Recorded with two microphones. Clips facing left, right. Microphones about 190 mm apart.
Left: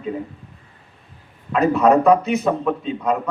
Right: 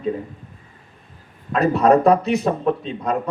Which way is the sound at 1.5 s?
40° right (ahead or behind).